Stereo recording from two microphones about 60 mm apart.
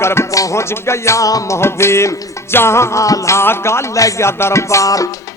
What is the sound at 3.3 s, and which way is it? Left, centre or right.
Music, left.